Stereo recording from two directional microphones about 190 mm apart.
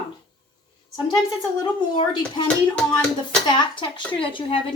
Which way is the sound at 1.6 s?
25° left (ahead or behind).